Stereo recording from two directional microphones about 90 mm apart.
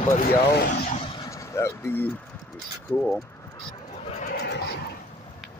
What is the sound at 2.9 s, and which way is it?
Speech, 5° left (ahead or behind).